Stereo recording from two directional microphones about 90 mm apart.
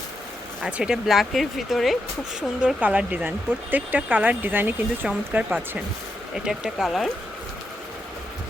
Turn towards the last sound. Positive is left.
turn(degrees=0)  # may be behind; listen again after turning